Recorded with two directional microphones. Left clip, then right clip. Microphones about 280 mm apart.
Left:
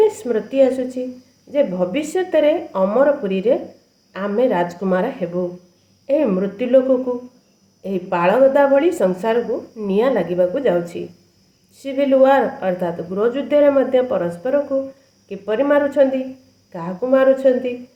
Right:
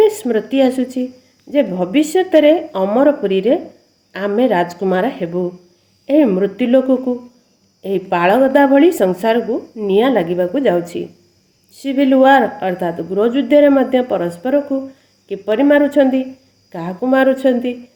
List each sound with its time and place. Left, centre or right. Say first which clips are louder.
0.0 s a woman's voice: right 3 dB; right